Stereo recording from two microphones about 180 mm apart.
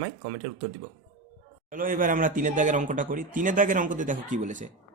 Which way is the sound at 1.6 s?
50° right (ahead or behind).